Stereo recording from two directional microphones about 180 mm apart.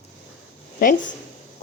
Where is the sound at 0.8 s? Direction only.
50° left (ahead or behind).